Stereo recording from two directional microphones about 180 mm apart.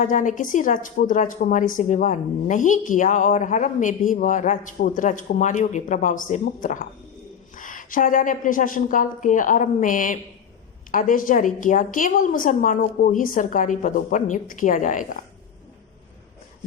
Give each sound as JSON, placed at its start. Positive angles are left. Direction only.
{"t": 0.0, "sound": "a woman's voice", "side_deg": 45}